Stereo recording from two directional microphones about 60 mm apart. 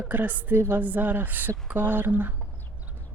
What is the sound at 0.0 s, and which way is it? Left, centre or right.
Speech, right.